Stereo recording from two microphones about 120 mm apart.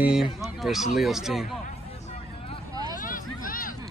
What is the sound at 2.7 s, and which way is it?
Vehicle, 30° right (ahead or behind).